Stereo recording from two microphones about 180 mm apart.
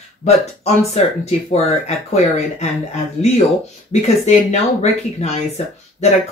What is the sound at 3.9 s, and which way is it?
Speech, 35° left (ahead or behind).